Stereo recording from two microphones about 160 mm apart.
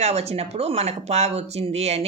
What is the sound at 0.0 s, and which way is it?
A woman's voice, 40° right (ahead or behind).